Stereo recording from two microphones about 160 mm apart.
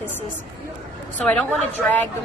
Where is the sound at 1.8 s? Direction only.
5° left (ahead or behind).